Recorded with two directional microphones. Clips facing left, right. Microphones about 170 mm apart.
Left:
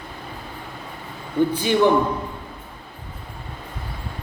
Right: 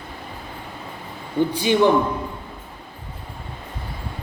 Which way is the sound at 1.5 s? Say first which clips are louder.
Right 2 dB; 15° right (ahead or behind).